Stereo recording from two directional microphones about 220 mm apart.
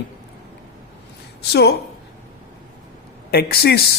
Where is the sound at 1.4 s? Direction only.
50° left (ahead or behind).